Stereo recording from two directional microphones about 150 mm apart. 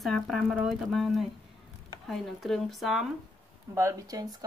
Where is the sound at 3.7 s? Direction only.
20° right (ahead or behind).